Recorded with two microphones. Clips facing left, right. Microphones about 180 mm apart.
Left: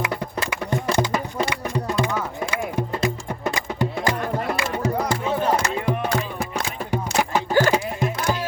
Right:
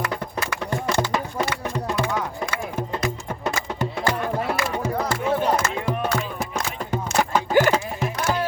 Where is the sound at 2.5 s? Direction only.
10° left (ahead or behind).